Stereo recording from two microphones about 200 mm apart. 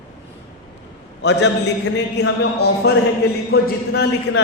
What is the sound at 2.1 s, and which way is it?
A man's voice, 55° left (ahead or behind).